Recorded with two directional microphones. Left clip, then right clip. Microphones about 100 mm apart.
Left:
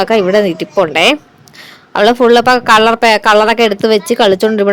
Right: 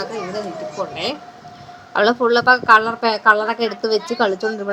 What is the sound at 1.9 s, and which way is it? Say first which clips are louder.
Speech: left 8 dB; 45° left (ahead or behind).